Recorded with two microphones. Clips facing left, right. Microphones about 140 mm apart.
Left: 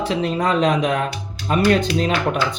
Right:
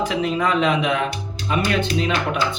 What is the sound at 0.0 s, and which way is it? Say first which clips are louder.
Speech: left 1 dB; 35° left (ahead or behind).